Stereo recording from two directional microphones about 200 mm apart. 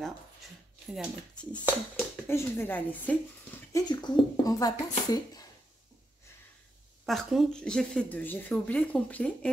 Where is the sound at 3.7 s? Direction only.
20° left (ahead or behind).